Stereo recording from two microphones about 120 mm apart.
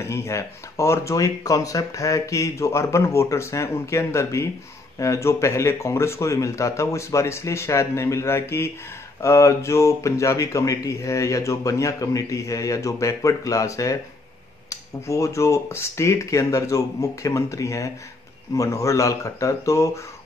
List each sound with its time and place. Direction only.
0.0 s speech: 25° left (ahead or behind)